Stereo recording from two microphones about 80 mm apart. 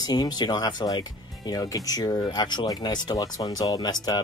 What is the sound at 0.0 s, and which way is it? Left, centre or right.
Speech, left.